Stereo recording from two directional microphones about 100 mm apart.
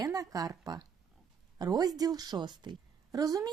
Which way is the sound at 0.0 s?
35° right (ahead or behind).